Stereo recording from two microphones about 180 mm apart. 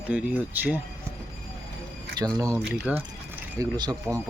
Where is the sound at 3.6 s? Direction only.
20° right (ahead or behind).